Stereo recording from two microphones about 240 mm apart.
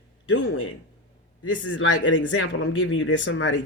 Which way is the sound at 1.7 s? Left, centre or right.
Left.